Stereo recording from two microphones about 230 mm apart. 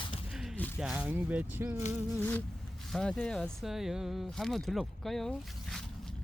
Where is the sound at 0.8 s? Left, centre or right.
Centre.